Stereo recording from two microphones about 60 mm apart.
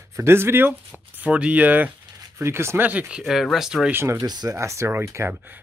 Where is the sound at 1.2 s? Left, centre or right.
Right.